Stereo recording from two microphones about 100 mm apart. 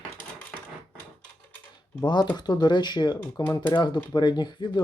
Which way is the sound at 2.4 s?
45° left (ahead or behind).